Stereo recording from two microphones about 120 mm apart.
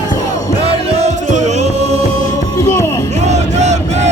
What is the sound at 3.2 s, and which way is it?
Crowd, 65° right (ahead or behind).